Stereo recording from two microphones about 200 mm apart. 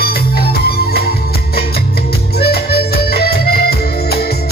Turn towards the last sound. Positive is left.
turn(degrees=50)  # may be behind; listen again after turning